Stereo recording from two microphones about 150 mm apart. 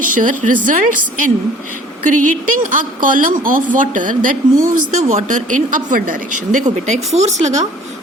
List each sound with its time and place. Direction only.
0.0 s speech: 60° right (ahead or behind)